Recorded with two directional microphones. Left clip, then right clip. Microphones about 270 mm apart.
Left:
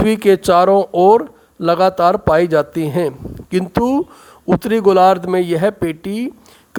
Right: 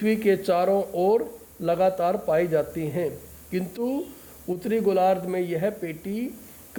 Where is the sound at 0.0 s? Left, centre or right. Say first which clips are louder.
Left 10 dB; left.